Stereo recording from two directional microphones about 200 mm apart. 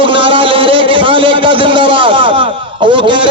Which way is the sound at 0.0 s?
25° right (ahead or behind).